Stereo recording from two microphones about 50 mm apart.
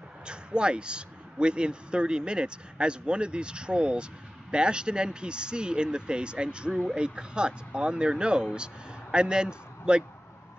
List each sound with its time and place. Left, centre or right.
0.2 s speech: centre